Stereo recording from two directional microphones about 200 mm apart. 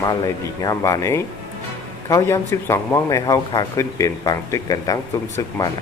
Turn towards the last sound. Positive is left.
turn(degrees=15)  # may be behind; listen again after turning